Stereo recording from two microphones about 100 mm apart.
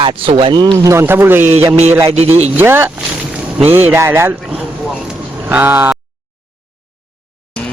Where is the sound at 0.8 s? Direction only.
25° right (ahead or behind).